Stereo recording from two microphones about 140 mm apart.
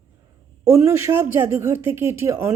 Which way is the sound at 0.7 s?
20° right (ahead or behind).